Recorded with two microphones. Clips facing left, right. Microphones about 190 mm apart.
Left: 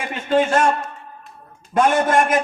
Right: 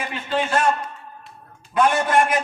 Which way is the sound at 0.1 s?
45° left (ahead or behind).